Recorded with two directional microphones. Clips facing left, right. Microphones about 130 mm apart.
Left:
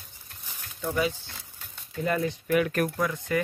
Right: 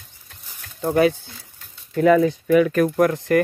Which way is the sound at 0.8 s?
60° right (ahead or behind).